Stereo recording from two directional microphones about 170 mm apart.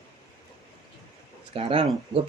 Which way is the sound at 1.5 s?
35° right (ahead or behind).